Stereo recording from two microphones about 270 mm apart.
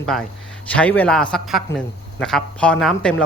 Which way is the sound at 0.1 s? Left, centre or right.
Centre.